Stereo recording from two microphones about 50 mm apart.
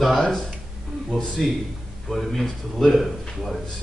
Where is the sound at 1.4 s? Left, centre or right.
Centre.